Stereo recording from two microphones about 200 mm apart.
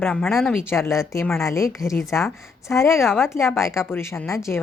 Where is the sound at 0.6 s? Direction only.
10° left (ahead or behind).